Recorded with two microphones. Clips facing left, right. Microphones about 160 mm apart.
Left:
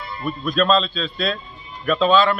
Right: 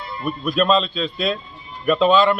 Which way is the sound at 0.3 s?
15° right (ahead or behind).